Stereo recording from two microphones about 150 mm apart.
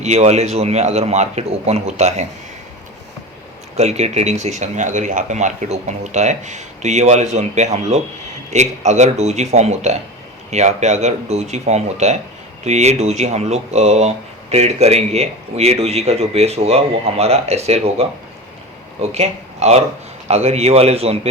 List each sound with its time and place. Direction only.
0.0 s speech: 50° right (ahead or behind)
3.8 s speech: 45° right (ahead or behind)
19.0 s speech: 45° right (ahead or behind)